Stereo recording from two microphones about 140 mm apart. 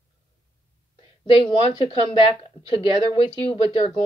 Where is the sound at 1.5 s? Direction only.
45° left (ahead or behind).